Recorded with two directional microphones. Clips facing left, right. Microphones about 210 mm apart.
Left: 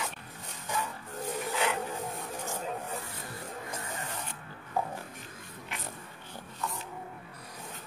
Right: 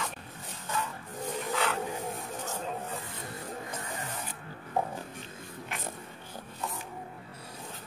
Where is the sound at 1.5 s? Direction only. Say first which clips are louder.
Right 1 dB; 15° left (ahead or behind).